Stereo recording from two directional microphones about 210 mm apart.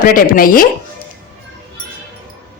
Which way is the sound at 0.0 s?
40° left (ahead or behind).